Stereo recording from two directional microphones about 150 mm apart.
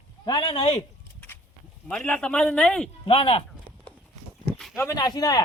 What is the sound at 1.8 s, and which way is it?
Speech, 5° left (ahead or behind).